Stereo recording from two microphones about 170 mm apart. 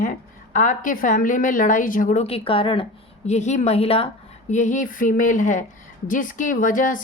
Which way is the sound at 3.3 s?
45° left (ahead or behind).